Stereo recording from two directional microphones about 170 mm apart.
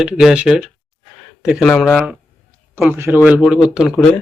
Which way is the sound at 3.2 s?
5° right (ahead or behind).